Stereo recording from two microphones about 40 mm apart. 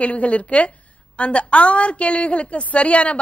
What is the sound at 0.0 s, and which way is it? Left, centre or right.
A woman's voice, left.